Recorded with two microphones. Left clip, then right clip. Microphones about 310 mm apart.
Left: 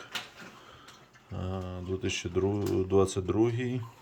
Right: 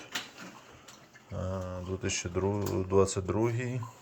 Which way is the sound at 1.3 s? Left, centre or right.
Centre.